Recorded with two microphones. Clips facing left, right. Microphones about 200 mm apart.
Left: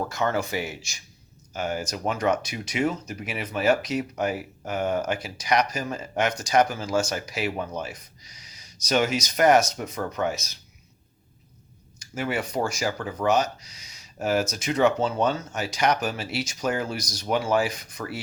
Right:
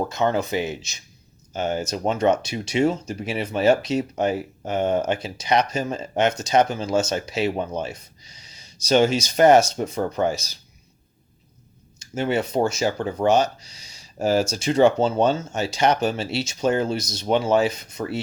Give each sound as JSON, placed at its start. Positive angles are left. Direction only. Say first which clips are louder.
{"t": 0.0, "sound": "speech", "louder": "right 4 dB", "side_deg": -20}
{"t": 11.9, "sound": "speech", "louder": "right 5 dB", "side_deg": -25}